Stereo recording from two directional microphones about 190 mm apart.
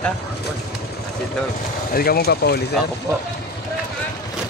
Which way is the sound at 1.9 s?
55° left (ahead or behind).